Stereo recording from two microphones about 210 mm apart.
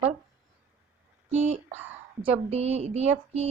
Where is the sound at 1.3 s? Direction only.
30° right (ahead or behind).